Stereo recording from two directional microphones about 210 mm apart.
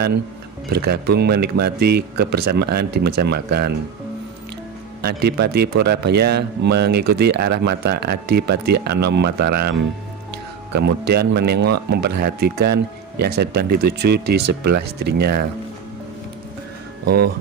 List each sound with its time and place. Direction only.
0.7 s speech: 50° right (ahead or behind)
5.0 s speech: 50° right (ahead or behind)
17.0 s speech: 50° right (ahead or behind)